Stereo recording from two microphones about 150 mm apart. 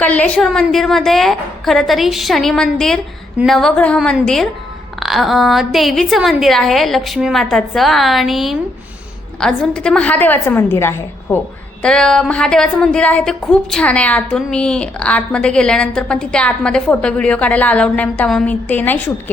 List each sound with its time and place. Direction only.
0.0 s a woman's voice: 10° left (ahead or behind)
11.8 s speech: 5° left (ahead or behind)